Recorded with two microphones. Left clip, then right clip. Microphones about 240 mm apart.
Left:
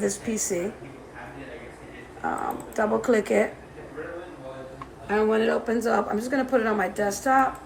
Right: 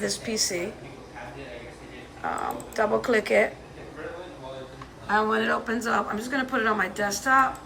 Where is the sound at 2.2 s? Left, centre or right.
Left.